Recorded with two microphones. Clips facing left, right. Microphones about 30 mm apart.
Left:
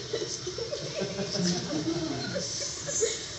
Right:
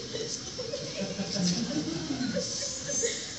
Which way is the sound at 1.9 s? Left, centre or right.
Centre.